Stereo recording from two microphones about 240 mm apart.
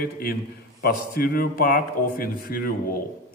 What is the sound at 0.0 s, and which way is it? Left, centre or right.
A man's voice, left.